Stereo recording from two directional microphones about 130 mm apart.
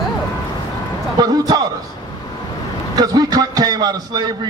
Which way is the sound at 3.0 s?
30° right (ahead or behind).